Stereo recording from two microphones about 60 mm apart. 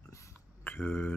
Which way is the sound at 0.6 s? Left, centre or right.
Left.